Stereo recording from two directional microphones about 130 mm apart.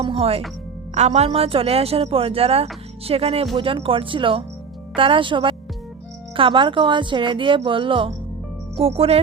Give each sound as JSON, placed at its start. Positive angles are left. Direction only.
{"t": 0.0, "sound": "a woman's voice", "side_deg": -45}